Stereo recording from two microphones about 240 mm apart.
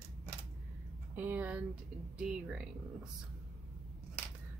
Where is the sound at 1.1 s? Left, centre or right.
Centre.